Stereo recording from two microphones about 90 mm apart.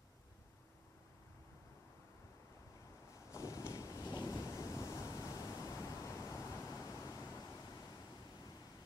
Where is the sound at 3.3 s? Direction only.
35° left (ahead or behind).